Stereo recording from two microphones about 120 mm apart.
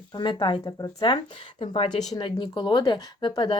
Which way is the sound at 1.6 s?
55° left (ahead or behind).